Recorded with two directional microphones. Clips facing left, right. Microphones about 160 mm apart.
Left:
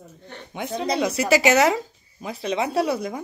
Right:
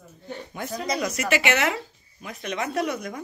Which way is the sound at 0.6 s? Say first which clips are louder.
Left 4 dB; 25° left (ahead or behind).